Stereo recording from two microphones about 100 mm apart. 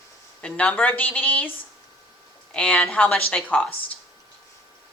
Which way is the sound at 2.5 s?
10° left (ahead or behind).